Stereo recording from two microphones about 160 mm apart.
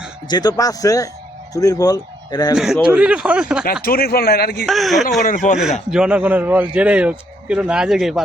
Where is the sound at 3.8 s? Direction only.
70° left (ahead or behind).